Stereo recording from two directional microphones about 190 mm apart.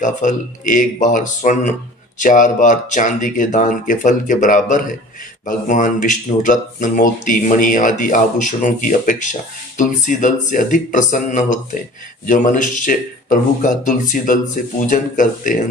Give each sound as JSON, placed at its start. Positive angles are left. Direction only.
{"t": 0.0, "sound": "speech", "side_deg": 40}